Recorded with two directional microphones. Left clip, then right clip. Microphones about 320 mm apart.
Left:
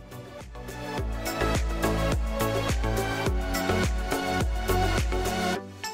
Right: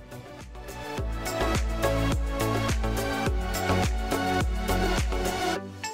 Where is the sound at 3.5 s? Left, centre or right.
Centre.